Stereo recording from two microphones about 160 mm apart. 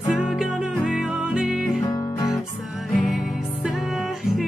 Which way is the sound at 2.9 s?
Centre (ahead or behind).